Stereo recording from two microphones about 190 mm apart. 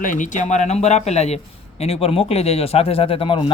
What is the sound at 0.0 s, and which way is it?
Speech, 45° left (ahead or behind).